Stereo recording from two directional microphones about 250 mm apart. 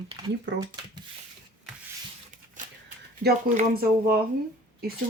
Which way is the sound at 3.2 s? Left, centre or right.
Right.